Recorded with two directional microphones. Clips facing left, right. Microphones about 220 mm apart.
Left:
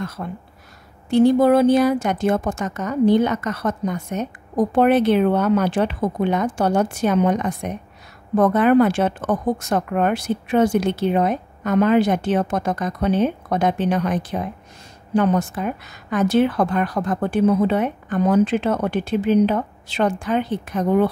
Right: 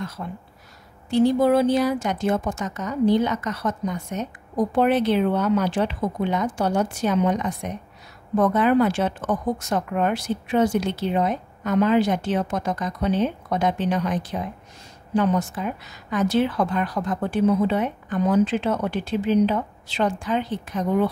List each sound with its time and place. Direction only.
0.0 s a woman's voice: 55° left (ahead or behind)